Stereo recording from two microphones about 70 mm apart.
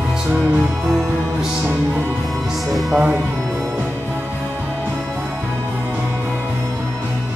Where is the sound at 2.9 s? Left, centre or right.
Centre.